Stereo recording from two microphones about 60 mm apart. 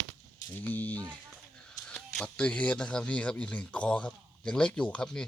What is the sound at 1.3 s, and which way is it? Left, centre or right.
Speech, centre.